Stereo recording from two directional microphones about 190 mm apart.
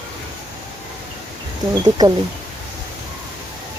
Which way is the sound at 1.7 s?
20° right (ahead or behind).